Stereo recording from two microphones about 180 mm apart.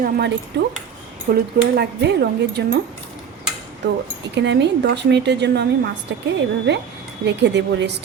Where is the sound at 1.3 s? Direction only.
65° right (ahead or behind).